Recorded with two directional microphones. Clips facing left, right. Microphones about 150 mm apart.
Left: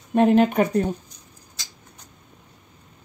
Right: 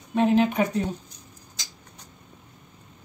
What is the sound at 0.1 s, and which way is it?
Speech, 55° left (ahead or behind).